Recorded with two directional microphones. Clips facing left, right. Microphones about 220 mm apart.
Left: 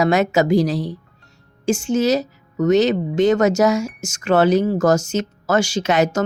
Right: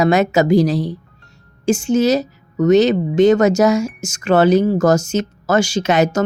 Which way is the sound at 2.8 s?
20° right (ahead or behind).